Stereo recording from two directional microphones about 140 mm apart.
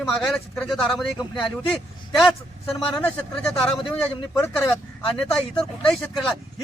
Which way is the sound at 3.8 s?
35° left (ahead or behind).